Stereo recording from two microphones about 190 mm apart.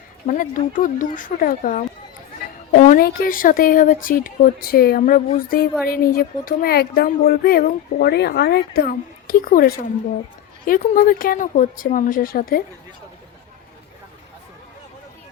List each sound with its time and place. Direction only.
0.3 s speech: 45° left (ahead or behind)
2.8 s speech: 50° left (ahead or behind)